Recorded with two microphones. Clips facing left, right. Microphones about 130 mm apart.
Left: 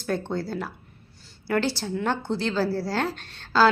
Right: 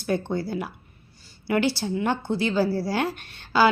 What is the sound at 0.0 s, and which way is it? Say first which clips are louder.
A woman's voice: right 2 dB; 10° right (ahead or behind).